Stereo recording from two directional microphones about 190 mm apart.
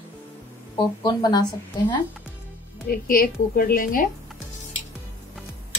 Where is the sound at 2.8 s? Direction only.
50° left (ahead or behind).